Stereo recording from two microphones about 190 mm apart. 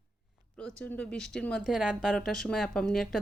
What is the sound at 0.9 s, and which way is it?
A woman's voice, 5° left (ahead or behind).